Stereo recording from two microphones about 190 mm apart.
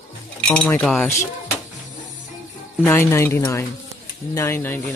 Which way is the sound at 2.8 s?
15° left (ahead or behind).